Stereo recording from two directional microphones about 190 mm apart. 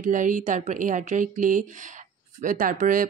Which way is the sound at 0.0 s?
45° right (ahead or behind).